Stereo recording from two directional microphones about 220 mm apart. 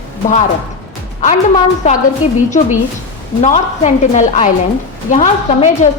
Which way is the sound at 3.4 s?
30° left (ahead or behind).